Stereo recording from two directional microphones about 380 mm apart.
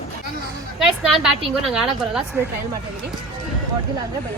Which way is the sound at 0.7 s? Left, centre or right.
Centre.